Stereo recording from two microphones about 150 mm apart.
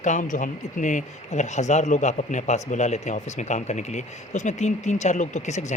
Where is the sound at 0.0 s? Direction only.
55° left (ahead or behind).